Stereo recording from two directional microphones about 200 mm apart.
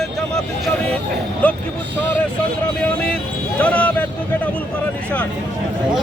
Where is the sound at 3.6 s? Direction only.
5° left (ahead or behind).